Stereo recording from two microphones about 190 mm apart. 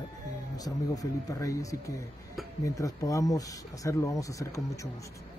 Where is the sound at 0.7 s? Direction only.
20° left (ahead or behind).